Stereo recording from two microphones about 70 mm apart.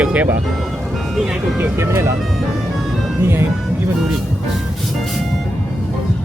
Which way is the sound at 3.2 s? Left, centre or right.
Right.